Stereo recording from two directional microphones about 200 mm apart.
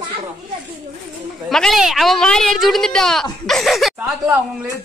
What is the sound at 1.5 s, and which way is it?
A woman's voice, centre (ahead or behind).